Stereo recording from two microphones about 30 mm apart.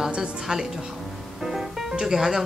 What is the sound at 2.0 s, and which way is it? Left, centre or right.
Speech, centre.